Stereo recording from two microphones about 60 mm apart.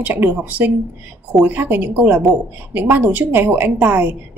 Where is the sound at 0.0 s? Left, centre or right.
Right.